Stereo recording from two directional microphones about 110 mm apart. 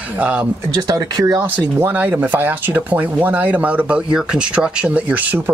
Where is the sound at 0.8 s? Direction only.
35° right (ahead or behind).